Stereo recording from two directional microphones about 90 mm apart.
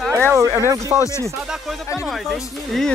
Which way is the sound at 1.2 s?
Centre (ahead or behind).